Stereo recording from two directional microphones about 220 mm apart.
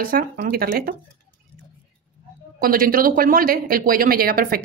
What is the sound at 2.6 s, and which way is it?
Speech, 40° right (ahead or behind).